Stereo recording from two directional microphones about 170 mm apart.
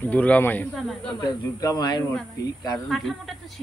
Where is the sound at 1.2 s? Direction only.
20° left (ahead or behind).